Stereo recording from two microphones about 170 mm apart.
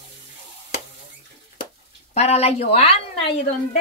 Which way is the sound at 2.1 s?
40° left (ahead or behind).